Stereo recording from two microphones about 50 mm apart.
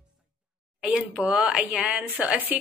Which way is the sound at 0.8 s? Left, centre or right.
Right.